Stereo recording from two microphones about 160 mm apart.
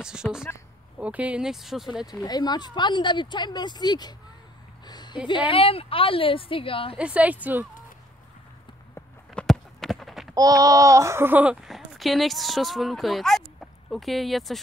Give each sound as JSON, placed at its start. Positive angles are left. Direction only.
{"t": 0.0, "sound": "speech", "side_deg": -5}
{"t": 2.2, "sound": "speech", "side_deg": 25}
{"t": 7.0, "sound": "a woman's voice", "side_deg": -10}
{"t": 9.3, "sound": "clip-clop", "side_deg": 5}
{"t": 10.3, "sound": "speech", "side_deg": -20}